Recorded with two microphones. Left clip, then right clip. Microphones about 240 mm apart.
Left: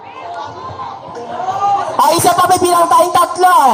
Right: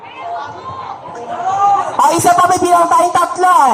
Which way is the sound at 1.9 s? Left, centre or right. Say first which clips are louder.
Left 1 dB; left.